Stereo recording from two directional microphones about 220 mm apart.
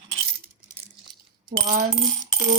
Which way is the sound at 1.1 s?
20° right (ahead or behind).